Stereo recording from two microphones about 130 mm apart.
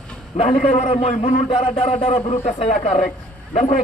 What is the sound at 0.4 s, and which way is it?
Speech, 80° left.